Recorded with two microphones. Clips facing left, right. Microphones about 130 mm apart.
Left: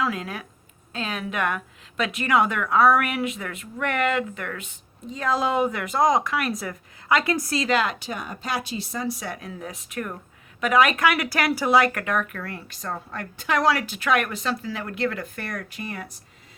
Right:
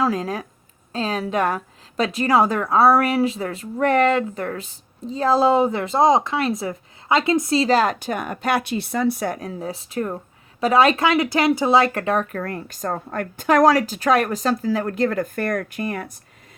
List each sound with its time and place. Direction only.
0.0 s a woman's voice: 35° right (ahead or behind)